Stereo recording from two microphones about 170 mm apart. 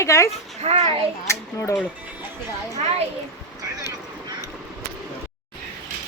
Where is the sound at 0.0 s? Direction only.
15° left (ahead or behind).